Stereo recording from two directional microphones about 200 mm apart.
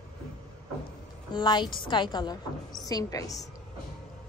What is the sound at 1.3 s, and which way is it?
A woman's voice, 20° left (ahead or behind).